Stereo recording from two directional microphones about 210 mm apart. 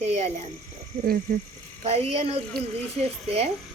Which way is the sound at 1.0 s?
45° right (ahead or behind).